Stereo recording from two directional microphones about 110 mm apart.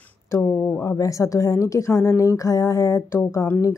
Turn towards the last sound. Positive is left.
turn(degrees=25)  # may be behind; listen again after turning